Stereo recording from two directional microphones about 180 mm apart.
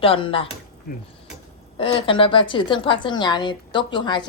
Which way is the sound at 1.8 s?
30° left (ahead or behind).